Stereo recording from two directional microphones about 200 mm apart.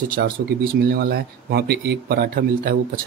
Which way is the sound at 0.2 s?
50° right (ahead or behind).